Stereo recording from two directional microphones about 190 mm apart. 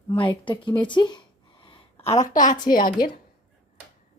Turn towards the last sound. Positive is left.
turn(degrees=45)  # may be behind; listen again after turning